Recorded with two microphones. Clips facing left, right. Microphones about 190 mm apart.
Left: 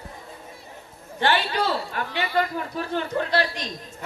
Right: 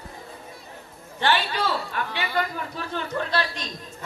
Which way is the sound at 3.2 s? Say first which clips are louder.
Left 2 dB; 15° left (ahead or behind).